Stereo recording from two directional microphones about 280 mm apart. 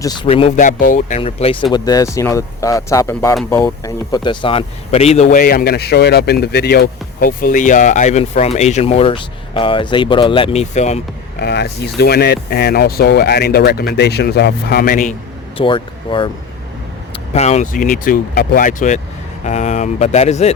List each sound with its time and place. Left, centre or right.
0.0 s speech: centre
11.3 s speech: left
15.5 s speech: centre
17.3 s speech: left